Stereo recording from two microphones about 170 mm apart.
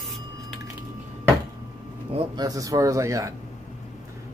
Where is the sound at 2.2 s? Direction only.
25° right (ahead or behind).